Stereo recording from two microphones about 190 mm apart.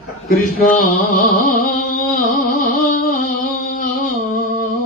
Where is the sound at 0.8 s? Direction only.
45° left (ahead or behind).